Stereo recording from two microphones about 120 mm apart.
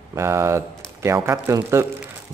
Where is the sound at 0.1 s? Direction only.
25° right (ahead or behind).